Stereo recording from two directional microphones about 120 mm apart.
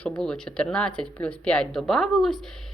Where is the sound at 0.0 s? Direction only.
5° left (ahead or behind).